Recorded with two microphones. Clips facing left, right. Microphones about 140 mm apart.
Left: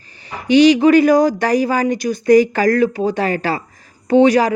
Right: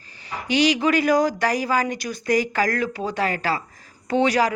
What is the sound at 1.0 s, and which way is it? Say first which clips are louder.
Speech: left 7 dB; 50° left (ahead or behind).